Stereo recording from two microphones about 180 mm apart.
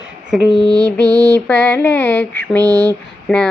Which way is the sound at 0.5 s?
20° right (ahead or behind).